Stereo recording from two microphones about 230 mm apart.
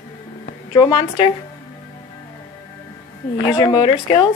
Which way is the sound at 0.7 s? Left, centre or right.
Centre.